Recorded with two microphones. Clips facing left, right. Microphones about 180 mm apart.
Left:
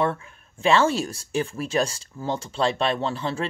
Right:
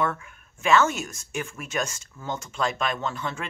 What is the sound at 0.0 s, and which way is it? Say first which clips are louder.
Speech: left 3 dB; 30° left (ahead or behind).